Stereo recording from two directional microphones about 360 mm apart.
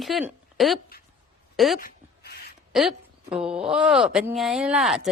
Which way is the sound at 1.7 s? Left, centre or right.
Left.